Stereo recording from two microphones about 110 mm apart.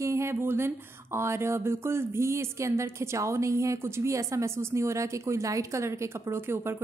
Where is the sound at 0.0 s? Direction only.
25° right (ahead or behind).